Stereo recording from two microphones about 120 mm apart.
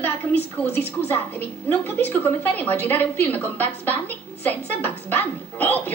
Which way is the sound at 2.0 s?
15° left (ahead or behind).